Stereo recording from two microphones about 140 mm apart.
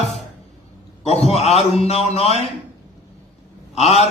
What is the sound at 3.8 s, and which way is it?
Speech, 50° left (ahead or behind).